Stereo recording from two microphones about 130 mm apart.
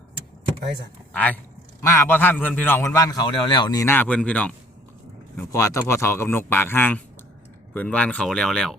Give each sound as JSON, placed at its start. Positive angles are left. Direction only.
{"t": 1.1, "sound": "a man's voice", "side_deg": 10}
{"t": 3.8, "sound": "speech", "side_deg": 15}
{"t": 5.5, "sound": "a man's voice", "side_deg": 25}